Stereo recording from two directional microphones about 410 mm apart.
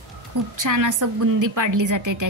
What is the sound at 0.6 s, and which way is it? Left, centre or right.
A woman's voice, right.